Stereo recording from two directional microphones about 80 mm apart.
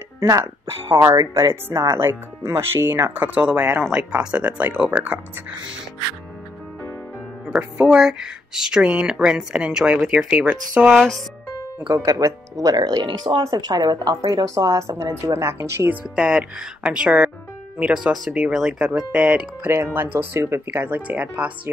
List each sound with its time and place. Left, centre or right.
0.2 s speech: right
1.4 s speech: right; by 5.2 s centre
7.5 s speech: centre
10.9 s speech: centre
11.9 s speech: right
12.7 s speech: right
15.9 s speech: centre
19.1 s speech: centre